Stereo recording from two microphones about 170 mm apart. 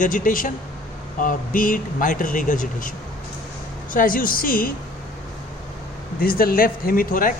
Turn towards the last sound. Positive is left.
turn(degrees=55)  # may be behind; listen again after turning